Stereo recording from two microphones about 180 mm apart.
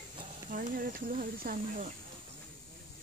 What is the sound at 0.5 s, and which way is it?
Speech, 50° right (ahead or behind).